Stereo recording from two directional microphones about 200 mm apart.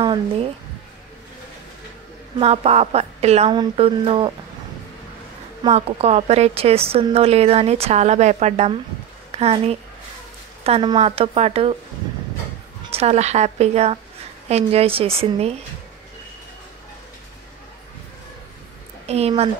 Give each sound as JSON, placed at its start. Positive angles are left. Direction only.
{"t": 0.0, "sound": "speech", "side_deg": -25}
{"t": 2.3, "sound": "a woman's voice", "side_deg": -30}
{"t": 5.6, "sound": "a woman's voice", "side_deg": -30}
{"t": 12.9, "sound": "a woman's voice", "side_deg": -30}
{"t": 19.0, "sound": "a woman's voice", "side_deg": -30}